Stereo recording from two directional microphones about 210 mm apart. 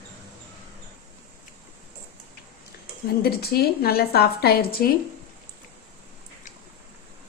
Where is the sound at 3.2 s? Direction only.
50° left (ahead or behind).